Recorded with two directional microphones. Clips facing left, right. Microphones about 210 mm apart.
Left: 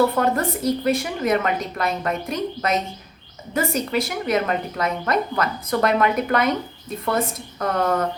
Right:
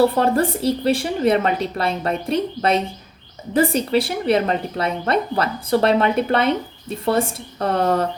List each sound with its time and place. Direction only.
0.0 s speech: 30° right (ahead or behind)